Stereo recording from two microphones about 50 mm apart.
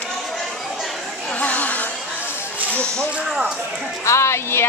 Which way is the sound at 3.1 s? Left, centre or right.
Right.